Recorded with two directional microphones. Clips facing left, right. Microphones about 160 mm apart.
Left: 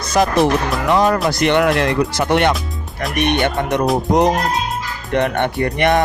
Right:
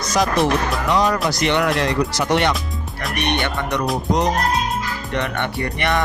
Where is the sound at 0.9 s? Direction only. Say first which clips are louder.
Left 4 dB; 55° left (ahead or behind).